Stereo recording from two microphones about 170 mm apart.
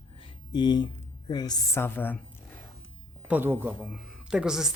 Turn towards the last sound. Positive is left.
turn(degrees=-5)  # may be behind; listen again after turning